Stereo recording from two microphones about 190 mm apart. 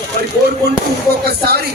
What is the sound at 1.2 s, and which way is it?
Speech, 55° right (ahead or behind).